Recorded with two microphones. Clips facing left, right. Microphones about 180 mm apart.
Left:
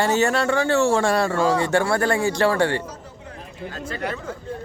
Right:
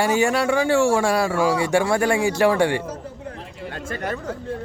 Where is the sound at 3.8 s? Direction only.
45° right (ahead or behind).